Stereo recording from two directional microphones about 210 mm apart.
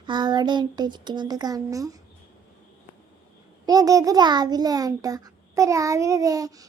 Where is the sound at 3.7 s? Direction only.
15° right (ahead or behind).